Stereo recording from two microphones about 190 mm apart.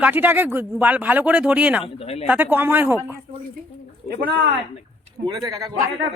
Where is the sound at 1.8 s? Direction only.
30° left (ahead or behind).